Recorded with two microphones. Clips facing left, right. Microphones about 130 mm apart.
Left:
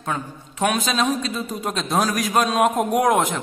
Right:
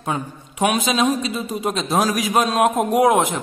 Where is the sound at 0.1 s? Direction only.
10° right (ahead or behind).